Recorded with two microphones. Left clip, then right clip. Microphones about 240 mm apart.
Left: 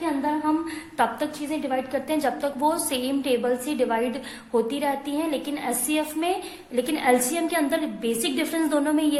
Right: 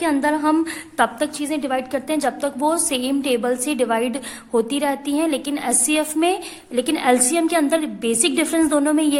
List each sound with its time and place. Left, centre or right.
0.0 s a woman's voice: right
0.9 s a woman's voice: right